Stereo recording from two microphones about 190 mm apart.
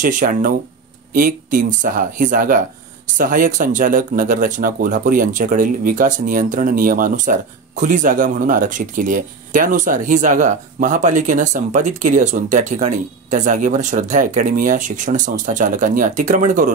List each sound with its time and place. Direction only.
0.0 s speech: 45° right (ahead or behind)